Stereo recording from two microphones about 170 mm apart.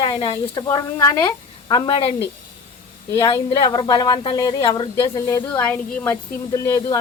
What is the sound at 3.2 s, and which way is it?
Speech, 20° left (ahead or behind).